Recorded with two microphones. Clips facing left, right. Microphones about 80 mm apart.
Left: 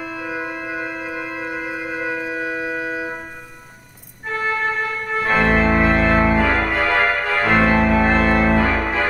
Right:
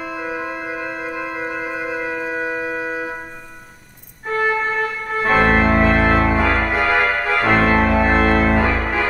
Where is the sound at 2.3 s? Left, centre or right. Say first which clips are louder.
Right 1 dB; right.